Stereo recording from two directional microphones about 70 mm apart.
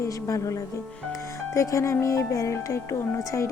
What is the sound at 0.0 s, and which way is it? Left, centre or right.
Speech, left.